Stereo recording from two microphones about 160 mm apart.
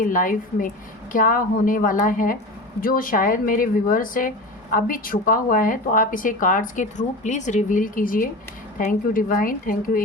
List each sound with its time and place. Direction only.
0.0 s a woman's voice: 55° left (ahead or behind)